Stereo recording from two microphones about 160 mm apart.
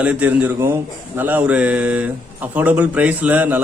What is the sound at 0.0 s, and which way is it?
Speech, 10° right (ahead or behind).